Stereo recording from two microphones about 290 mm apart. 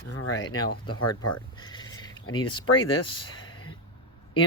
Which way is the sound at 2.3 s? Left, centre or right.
Centre.